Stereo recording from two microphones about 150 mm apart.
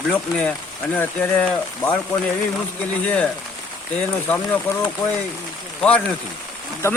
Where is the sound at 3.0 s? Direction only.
10° left (ahead or behind).